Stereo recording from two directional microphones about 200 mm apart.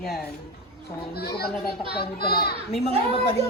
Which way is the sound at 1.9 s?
50° left (ahead or behind).